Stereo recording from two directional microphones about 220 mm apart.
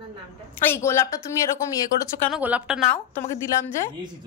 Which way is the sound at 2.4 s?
5° right (ahead or behind).